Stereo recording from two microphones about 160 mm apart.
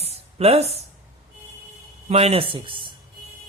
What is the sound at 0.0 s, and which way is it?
Music, 40° right (ahead or behind).